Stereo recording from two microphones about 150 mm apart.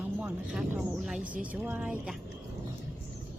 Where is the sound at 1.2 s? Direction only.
65° right (ahead or behind).